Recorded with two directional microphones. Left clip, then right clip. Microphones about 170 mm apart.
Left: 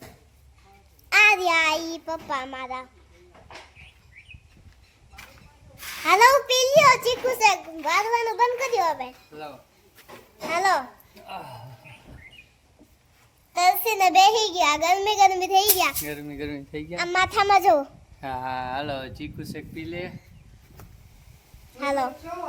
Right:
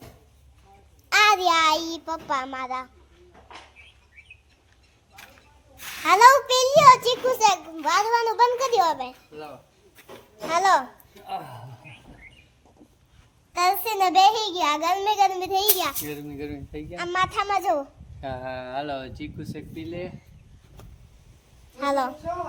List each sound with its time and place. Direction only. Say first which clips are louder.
1.1 s child singing: left 1 dB; centre (ahead or behind)
6.1 s child singing: right 2 dB; 5° left (ahead or behind)
8.4 s a child's voice: right 4 dB; 15° right (ahead or behind)
10.5 s child singing: right 2 dB; centre (ahead or behind)
13.5 s a child's voice: left 2 dB; 5° left (ahead or behind); by 16.5 s 20° left (ahead or behind)
16.5 s speech: left 3 dB; 35° left (ahead or behind)
16.9 s speech: left 2 dB; 25° left (ahead or behind)
18.2 s speech: left 3 dB; 15° left (ahead or behind)
21.8 s child singing: right 1 dB; centre (ahead or behind)